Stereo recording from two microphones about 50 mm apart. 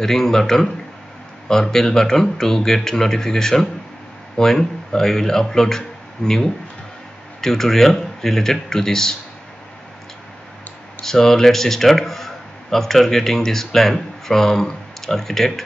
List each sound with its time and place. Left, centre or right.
0.0 s speech: centre
11.0 s speech: centre